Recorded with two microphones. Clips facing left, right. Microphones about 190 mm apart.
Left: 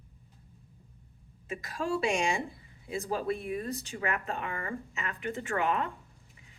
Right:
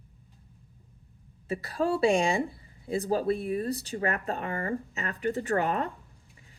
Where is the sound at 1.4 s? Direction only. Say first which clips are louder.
Right 5 dB; 35° right (ahead or behind).